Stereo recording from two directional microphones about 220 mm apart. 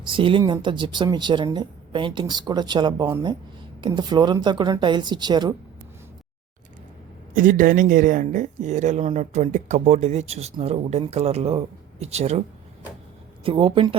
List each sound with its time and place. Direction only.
0.0 s speech: 20° right (ahead or behind)
7.3 s speech: 35° right (ahead or behind)
13.4 s speech: 25° right (ahead or behind)